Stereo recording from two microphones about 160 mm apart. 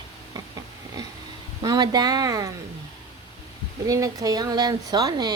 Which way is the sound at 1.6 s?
25° right (ahead or behind).